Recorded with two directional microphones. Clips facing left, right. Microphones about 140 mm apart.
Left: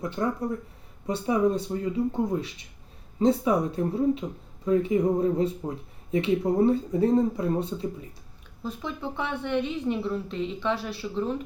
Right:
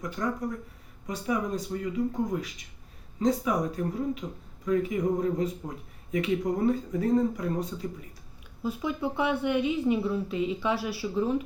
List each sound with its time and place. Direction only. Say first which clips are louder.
0.0 s speech: left 3 dB; 30° left (ahead or behind)
8.6 s a woman's voice: right 3 dB; 10° right (ahead or behind)